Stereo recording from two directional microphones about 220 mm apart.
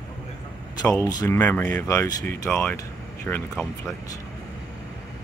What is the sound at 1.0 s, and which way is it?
Speech, 15° left (ahead or behind).